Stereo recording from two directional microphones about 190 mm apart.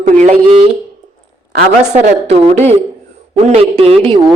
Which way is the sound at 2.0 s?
35° right (ahead or behind).